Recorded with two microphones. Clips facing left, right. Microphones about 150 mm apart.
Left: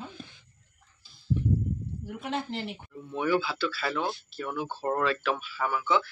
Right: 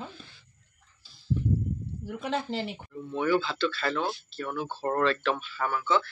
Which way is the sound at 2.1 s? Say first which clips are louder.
Right 2 dB; 90° right.